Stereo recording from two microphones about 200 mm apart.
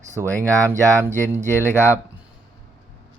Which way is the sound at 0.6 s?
10° right (ahead or behind).